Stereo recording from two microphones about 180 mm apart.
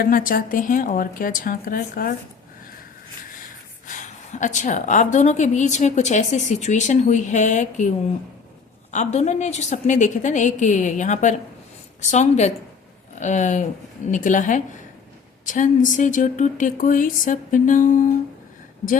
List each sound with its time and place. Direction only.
0.0 s speech: 50° left (ahead or behind)
3.8 s a woman's voice: 45° left (ahead or behind)